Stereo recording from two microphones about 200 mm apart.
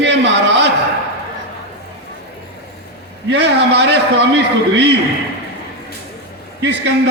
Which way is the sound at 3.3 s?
55° right (ahead or behind).